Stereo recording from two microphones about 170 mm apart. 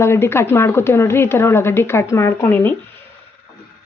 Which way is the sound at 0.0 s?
15° left (ahead or behind).